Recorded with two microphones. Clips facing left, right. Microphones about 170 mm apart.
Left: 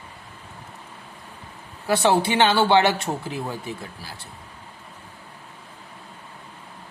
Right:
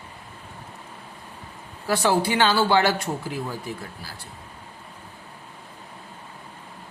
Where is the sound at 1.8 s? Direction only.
20° left (ahead or behind).